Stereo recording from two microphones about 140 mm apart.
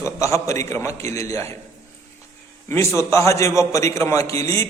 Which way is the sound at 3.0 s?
20° left (ahead or behind).